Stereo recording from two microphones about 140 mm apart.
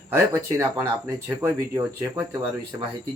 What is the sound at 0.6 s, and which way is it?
Speech, 25° right (ahead or behind).